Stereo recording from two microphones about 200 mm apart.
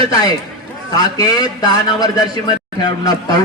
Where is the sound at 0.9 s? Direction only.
20° left (ahead or behind).